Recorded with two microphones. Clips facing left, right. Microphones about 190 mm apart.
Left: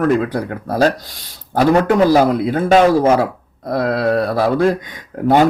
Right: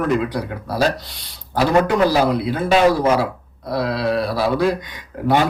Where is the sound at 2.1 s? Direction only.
50° left (ahead or behind).